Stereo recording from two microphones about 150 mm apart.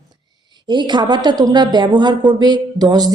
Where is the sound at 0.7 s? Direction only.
30° right (ahead or behind).